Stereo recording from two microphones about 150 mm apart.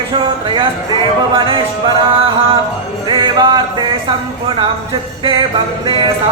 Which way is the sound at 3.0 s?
30° right (ahead or behind).